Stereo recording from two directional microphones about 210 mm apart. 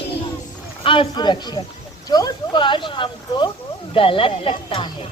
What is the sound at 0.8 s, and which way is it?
Speech, 25° left (ahead or behind).